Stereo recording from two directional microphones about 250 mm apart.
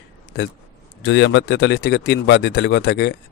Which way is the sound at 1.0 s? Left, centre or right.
Left.